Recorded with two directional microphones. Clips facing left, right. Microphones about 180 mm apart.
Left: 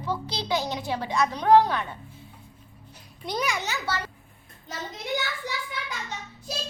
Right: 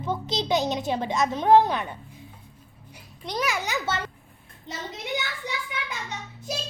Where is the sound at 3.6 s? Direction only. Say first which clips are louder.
Right 2 dB; 20° right (ahead or behind).